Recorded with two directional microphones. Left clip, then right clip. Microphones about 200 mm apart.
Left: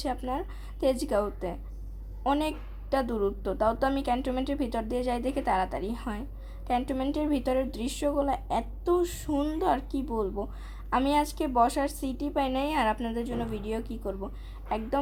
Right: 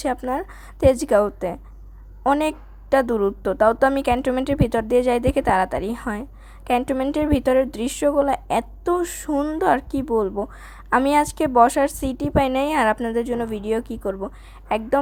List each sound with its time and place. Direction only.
0.0 s speech: 35° right (ahead or behind)